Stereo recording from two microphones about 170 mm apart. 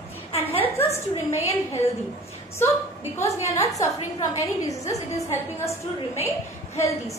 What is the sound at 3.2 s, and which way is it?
A woman's voice, 20° left (ahead or behind).